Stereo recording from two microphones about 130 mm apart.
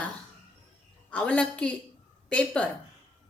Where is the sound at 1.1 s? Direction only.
10° left (ahead or behind).